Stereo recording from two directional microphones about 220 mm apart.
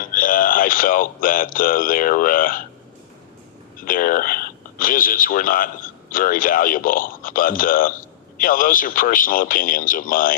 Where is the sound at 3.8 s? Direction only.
40° left (ahead or behind).